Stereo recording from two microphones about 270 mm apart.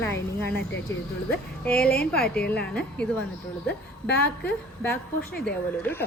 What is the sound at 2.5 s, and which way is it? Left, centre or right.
Speech, centre.